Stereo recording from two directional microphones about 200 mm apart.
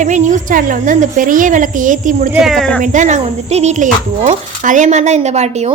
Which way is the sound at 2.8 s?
35° right (ahead or behind).